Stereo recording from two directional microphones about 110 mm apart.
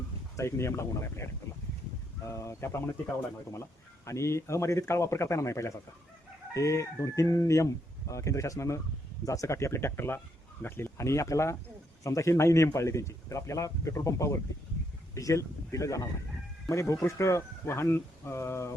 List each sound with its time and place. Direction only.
0.3 s a man's voice: 25° left (ahead or behind)
4.0 s a man's voice: 25° left (ahead or behind)